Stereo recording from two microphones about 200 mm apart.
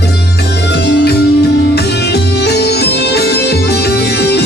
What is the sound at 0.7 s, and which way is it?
Music, 55° left (ahead or behind).